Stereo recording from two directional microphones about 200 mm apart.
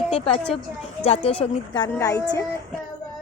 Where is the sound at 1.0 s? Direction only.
30° left (ahead or behind).